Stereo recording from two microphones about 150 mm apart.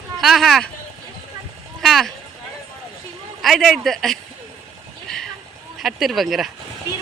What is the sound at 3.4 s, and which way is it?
Speech, centre (ahead or behind).